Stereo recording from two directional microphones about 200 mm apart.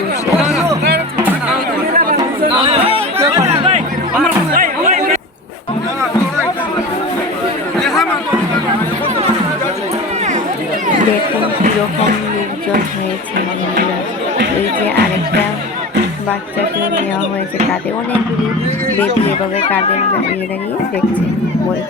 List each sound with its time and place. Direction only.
2.0 s chatter: 45° right (ahead or behind)
2.6 s chatter: 30° right (ahead or behind)
3.4 s music: 30° right (ahead or behind)
4.5 s chatter: 45° right (ahead or behind)
7.8 s chatter: centre (ahead or behind)